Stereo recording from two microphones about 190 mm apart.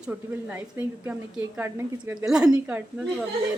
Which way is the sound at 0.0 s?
10° right (ahead or behind).